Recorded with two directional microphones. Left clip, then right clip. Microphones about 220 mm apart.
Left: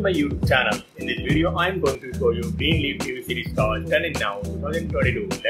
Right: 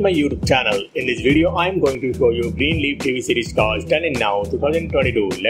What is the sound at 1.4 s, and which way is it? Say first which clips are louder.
Speech: right 4 dB; 25° right (ahead or behind).